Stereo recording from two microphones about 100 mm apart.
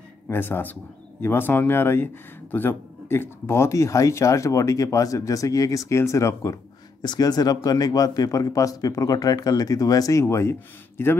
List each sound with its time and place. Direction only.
0.3 s speech: 20° left (ahead or behind)
7.0 s speech: 45° left (ahead or behind); by 11.1 s 25° left (ahead or behind)